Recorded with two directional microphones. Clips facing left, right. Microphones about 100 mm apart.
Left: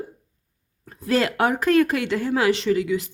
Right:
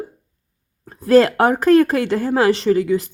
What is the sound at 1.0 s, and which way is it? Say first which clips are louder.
A woman's voice: right 8 dB; 40° right (ahead or behind).